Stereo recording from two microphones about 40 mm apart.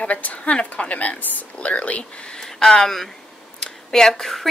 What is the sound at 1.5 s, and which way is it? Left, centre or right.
Speech, left.